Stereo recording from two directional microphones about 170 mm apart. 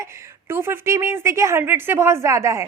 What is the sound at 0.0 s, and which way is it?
A woman's voice, 15° right (ahead or behind).